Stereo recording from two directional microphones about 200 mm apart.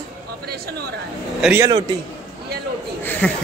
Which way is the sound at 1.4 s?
10° right (ahead or behind).